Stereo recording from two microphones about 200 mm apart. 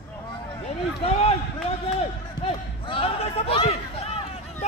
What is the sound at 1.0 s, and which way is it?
Run, 30° left (ahead or behind).